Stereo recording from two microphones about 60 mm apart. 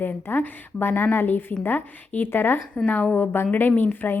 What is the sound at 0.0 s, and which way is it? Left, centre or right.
A woman's voice, left.